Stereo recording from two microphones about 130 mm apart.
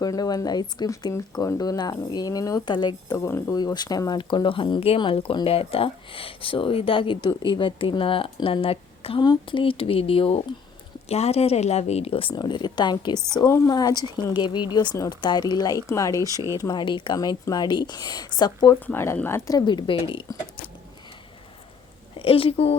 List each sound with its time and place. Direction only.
0.0 s speech: 30° left (ahead or behind); by 12.3 s 45° left (ahead or behind)
12.3 s speech: 35° left (ahead or behind)
16.2 s speech: 25° right (ahead or behind)
16.6 s speech: 30° left (ahead or behind)
18.9 s speech: 15° left (ahead or behind)
19.5 s speech: 30° left (ahead or behind)
22.2 s speech: 45° left (ahead or behind)